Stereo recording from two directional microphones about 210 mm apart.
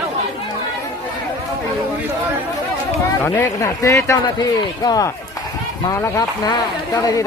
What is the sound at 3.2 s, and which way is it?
A man's voice, 15° left (ahead or behind).